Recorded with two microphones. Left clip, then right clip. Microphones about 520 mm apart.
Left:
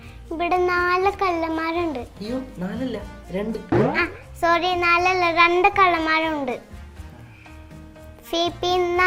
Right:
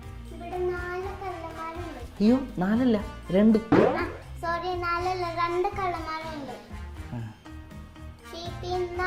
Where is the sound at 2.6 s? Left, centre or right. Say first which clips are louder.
Right 4 dB; right.